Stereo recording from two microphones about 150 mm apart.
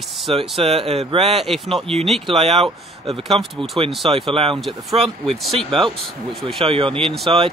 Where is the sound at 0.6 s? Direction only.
40° right (ahead or behind).